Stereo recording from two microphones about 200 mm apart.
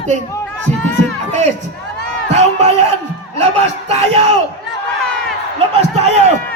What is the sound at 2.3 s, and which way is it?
Speech, 35° right (ahead or behind).